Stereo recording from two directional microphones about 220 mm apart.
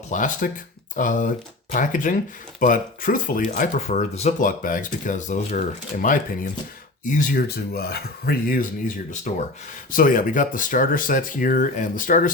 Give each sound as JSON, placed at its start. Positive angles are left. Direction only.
{"t": 0.1, "sound": "speech", "side_deg": 35}